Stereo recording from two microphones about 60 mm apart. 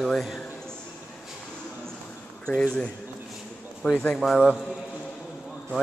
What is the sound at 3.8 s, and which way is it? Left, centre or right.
Speech, left.